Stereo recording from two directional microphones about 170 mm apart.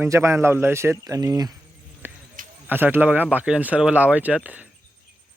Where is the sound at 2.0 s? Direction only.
10° right (ahead or behind).